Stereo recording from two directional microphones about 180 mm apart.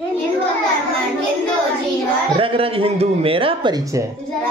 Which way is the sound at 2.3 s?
30° right (ahead or behind).